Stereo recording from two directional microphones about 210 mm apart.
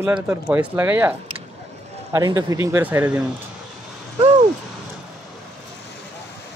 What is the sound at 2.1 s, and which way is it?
Speech, 15° right (ahead or behind).